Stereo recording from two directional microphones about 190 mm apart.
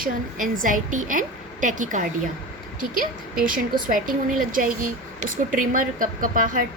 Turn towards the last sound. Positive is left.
turn(degrees=-45)  # may be behind; listen again after turning